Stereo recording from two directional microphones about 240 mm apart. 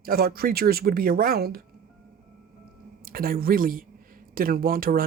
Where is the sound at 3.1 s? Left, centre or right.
Right.